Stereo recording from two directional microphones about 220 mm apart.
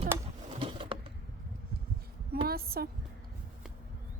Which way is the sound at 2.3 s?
45° right (ahead or behind).